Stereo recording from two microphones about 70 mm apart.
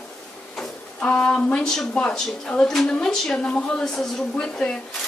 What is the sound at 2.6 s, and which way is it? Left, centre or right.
A woman's voice, centre.